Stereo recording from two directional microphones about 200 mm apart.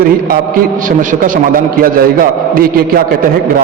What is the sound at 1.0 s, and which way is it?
A man's voice, 40° right (ahead or behind).